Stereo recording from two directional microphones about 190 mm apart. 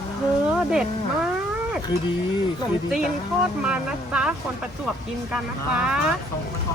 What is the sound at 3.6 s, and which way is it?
Speech, 5° right (ahead or behind).